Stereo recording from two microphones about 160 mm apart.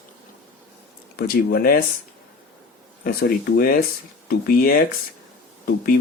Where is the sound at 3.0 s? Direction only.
75° left (ahead or behind).